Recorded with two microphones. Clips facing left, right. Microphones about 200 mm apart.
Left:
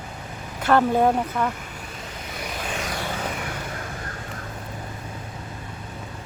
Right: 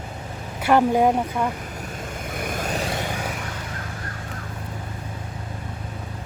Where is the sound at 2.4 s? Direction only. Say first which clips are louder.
Right 4 dB; 50° right (ahead or behind).